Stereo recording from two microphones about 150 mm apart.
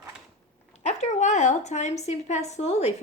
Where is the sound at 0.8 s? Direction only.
50° left (ahead or behind).